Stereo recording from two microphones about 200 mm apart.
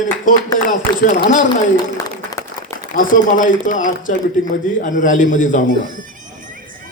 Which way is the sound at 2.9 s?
40° left (ahead or behind).